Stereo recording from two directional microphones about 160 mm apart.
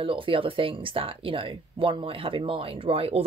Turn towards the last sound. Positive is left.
turn(degrees=-35)  # may be behind; listen again after turning